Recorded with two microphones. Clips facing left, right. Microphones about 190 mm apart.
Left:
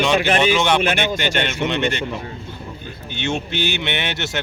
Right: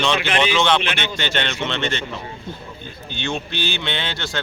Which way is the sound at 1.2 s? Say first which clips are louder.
Left 3 dB; 10° left (ahead or behind).